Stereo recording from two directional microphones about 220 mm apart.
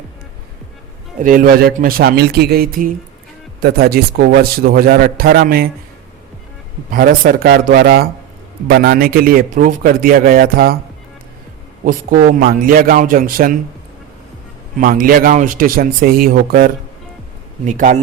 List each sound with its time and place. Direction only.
1.2 s a man's voice: 40° right (ahead or behind)
6.9 s a man's voice: 40° right (ahead or behind)
11.9 s a man's voice: 40° right (ahead or behind)
14.8 s a man's voice: 40° right (ahead or behind)